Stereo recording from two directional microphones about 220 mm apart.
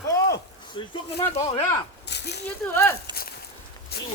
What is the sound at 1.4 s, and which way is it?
Speech, 20° left (ahead or behind).